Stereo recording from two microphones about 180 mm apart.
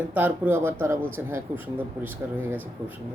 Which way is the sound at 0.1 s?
10° right (ahead or behind).